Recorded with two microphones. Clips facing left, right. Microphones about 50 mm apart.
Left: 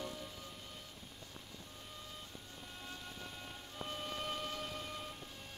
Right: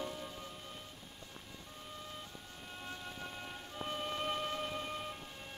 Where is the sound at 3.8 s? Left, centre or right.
Right.